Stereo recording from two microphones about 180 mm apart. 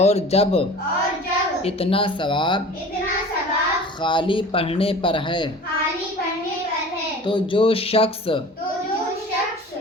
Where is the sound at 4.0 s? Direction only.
25° left (ahead or behind).